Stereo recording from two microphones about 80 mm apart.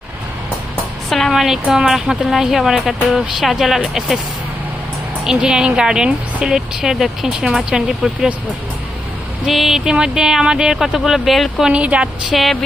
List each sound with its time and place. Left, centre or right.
1.1 s speech: centre
5.2 s speech: centre
9.5 s speech: centre
11.7 s speech: centre
12.3 s speech: centre